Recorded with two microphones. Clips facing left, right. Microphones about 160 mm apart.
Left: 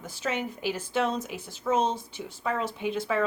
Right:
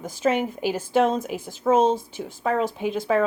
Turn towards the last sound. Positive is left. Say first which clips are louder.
# right 5 dB
turn(degrees=-45)  # may be behind; listen again after turning